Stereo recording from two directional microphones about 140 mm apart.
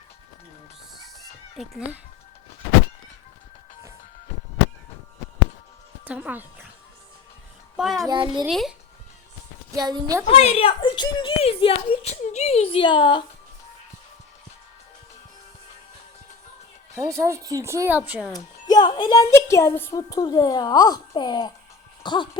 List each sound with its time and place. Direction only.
6.1 s speech: 10° right (ahead or behind)
7.8 s music: centre (ahead or behind)
8.0 s a child's voice: 35° right (ahead or behind)
8.4 s music: centre (ahead or behind)
9.7 s speech: 30° right (ahead or behind)
10.2 s speech: 45° left (ahead or behind)
16.9 s speech: 20° right (ahead or behind)
18.3 s a woman's voice: 30° left (ahead or behind)